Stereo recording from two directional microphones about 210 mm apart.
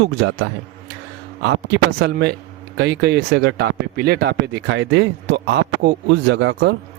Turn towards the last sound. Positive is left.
turn(degrees=-55)  # may be behind; listen again after turning